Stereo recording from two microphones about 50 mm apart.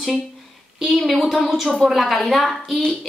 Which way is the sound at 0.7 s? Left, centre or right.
Centre.